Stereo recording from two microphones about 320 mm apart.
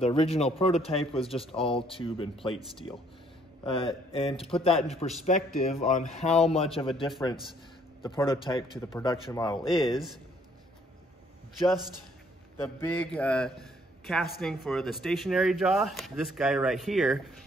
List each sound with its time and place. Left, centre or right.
0.0 s a man's voice: centre
9.6 s a man's voice: centre
12.6 s a man's voice: centre